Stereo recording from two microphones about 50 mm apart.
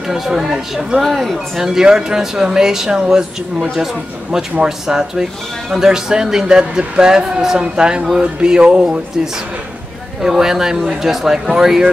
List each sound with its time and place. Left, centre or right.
0.1 s speech: centre
1.6 s speech: centre